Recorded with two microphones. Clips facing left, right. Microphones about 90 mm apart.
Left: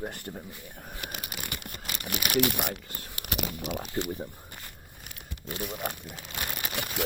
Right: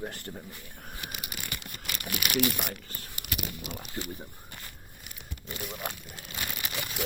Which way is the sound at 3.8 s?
25° left (ahead or behind).